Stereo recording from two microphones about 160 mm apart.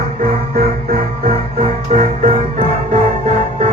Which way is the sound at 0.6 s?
60° right (ahead or behind).